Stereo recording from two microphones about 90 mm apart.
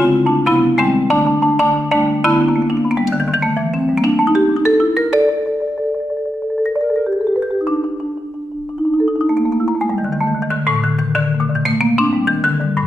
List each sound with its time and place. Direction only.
0.0 s marimba: centre (ahead or behind)
3.9 s music: 5° right (ahead or behind)
9.0 s music: 5° right (ahead or behind)
11.8 s music: 5° right (ahead or behind)